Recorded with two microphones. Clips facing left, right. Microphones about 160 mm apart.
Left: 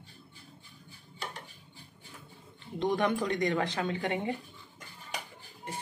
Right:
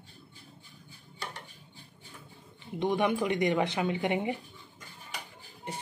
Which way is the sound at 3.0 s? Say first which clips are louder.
Right 4 dB; 15° right (ahead or behind).